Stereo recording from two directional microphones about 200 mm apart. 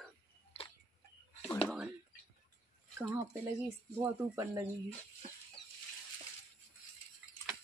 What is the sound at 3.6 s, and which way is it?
Speech, 15° right (ahead or behind).